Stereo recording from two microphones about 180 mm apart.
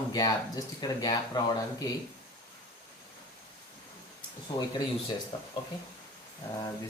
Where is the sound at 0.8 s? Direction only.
20° left (ahead or behind).